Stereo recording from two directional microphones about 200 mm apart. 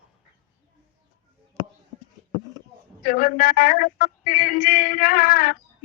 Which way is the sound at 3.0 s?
45° left (ahead or behind).